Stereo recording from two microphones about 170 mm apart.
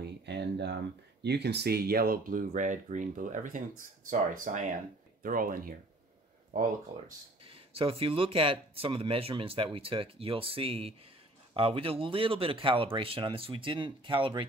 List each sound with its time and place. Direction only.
0.0 s a sound: 80° right
1.2 s speech: 80° right; by 5.8 s 55° right (ahead or behind)
7.4 s speech: 35° right (ahead or behind)